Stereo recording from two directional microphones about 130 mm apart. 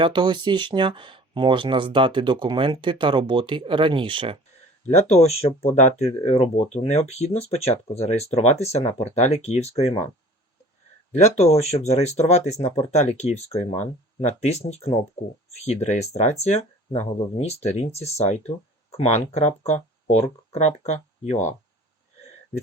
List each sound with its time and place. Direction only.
0.0 s speech: 40° right (ahead or behind)
4.9 s speech: 55° left (ahead or behind)
11.2 s speech: 55° left (ahead or behind)
15.6 s speech: 60° left (ahead or behind)